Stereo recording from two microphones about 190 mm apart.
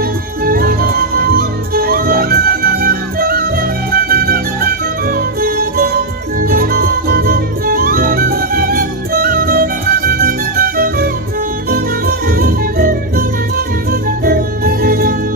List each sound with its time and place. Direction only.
0.5 s music: 50° right (ahead or behind)
14.2 s music: 50° right (ahead or behind)